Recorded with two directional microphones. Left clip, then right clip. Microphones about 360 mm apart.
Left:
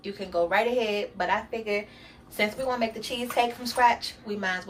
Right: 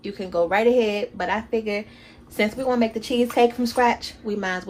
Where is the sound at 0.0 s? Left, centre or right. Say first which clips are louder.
Right 4 dB; centre.